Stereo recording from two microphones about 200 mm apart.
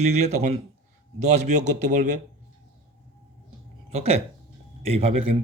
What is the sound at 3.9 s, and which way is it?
Speech, 30° right (ahead or behind).